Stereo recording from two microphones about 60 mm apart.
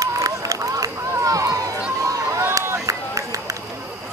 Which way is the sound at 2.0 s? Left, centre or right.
Right.